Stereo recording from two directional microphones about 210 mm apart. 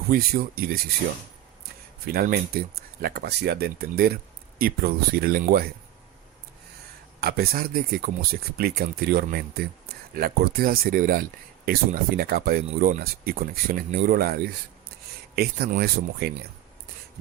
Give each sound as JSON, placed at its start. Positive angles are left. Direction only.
{"t": 0.1, "sound": "speech", "side_deg": -45}
{"t": 2.0, "sound": "speech", "side_deg": -45}
{"t": 7.2, "sound": "speech", "side_deg": -45}